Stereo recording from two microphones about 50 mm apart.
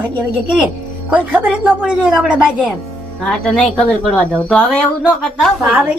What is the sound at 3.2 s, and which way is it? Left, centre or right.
Speech, centre.